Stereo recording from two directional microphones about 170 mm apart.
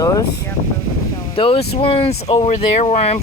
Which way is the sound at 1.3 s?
30° left (ahead or behind).